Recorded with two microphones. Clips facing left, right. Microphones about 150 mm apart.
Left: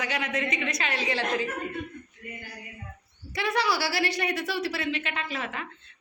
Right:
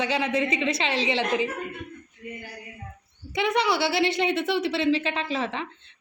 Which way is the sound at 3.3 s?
20° right (ahead or behind).